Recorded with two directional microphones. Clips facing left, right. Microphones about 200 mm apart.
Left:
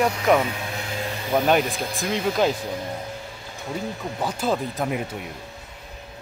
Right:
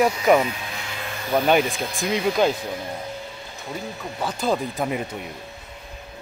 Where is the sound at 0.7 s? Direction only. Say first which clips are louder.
Left 4 dB; 40° left (ahead or behind).